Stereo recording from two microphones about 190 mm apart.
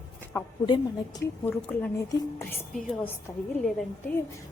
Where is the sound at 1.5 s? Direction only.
10° left (ahead or behind).